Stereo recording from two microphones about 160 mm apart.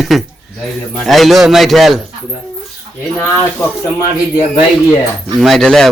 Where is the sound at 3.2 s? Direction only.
15° left (ahead or behind).